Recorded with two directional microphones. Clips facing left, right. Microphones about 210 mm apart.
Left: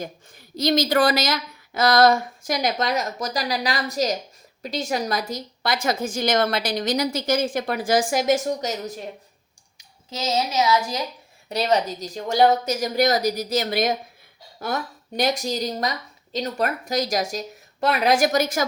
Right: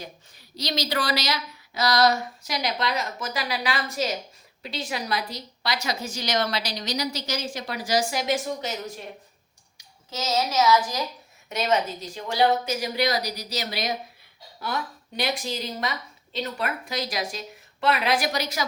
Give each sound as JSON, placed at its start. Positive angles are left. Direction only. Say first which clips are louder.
{"t": 0.0, "sound": "speech", "louder": "left 7 dB", "side_deg": 50}
{"t": 10.2, "sound": "speech", "louder": "even", "side_deg": 25}
{"t": 11.4, "sound": "speech", "louder": "left 3 dB", "side_deg": 35}